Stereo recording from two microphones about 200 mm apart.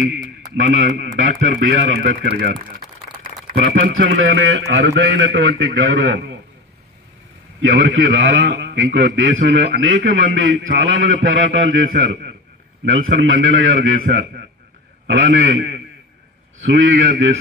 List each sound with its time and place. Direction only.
0.8 s speech: 50° right (ahead or behind)
3.6 s a man's voice: 70° right (ahead or behind)
7.6 s a man's voice: 65° right (ahead or behind)